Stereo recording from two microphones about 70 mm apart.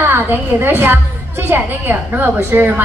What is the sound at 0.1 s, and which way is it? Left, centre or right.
A woman's voice, right.